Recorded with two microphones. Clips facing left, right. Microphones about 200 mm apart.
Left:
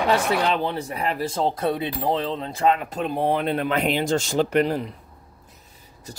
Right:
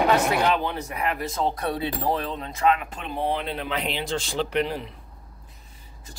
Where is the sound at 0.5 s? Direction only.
30° left (ahead or behind).